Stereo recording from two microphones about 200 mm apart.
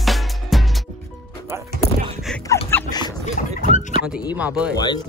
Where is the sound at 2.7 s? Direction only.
10° left (ahead or behind).